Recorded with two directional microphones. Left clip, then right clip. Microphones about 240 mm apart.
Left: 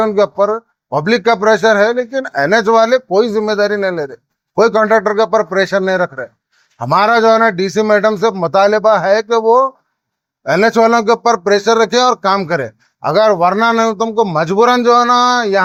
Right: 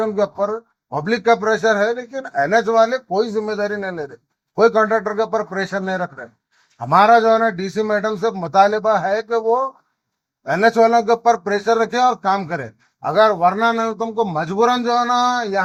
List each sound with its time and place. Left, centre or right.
0.0 s a man's voice: left
2.3 s speech: left
2.7 s a man's voice: left
10.4 s a man's voice: left
14.9 s speech: left